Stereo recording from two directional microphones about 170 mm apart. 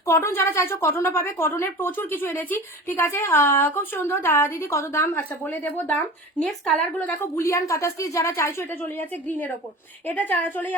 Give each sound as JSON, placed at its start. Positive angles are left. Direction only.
{"t": 0.0, "sound": "a woman's voice", "side_deg": 15}